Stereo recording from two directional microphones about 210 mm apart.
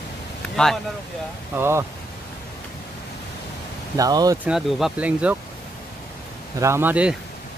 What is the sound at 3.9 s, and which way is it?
Speech, 15° right (ahead or behind).